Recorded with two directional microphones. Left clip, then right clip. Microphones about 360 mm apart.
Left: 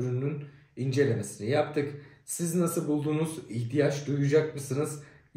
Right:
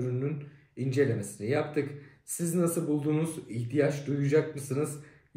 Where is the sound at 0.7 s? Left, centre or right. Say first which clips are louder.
Left 1 dB; centre.